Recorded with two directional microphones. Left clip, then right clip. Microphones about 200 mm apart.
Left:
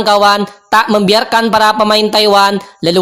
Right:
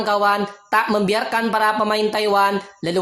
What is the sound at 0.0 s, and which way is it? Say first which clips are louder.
Speech: left 9 dB; 40° left (ahead or behind).